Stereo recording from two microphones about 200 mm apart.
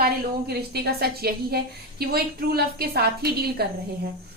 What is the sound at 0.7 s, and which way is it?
A woman's voice, 50° right (ahead or behind).